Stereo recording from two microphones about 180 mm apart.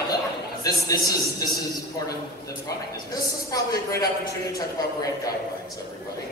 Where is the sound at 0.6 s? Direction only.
20° left (ahead or behind).